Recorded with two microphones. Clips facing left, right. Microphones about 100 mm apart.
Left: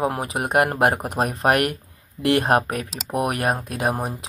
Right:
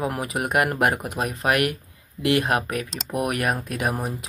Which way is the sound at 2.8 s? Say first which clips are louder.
Even; 5° left (ahead or behind).